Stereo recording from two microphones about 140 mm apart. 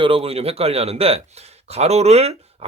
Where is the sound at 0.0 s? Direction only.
40° right (ahead or behind).